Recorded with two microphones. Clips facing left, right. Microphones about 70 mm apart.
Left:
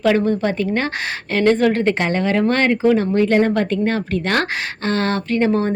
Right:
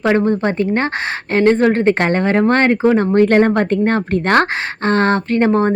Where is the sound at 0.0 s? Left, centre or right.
Right.